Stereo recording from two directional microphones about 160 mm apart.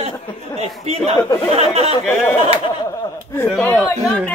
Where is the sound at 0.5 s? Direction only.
40° right (ahead or behind).